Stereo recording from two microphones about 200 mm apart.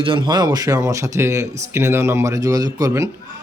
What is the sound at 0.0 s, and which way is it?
Speech, 25° right (ahead or behind).